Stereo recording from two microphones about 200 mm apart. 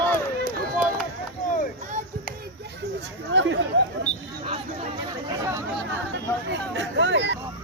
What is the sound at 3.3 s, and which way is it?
Chatter, 65° right (ahead or behind).